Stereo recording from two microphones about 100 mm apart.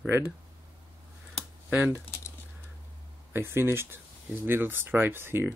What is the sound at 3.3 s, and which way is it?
Speech, 25° right (ahead or behind).